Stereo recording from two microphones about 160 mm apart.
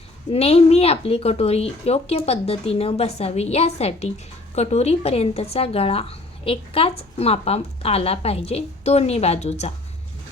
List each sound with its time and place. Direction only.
0.3 s speech: 40° left (ahead or behind)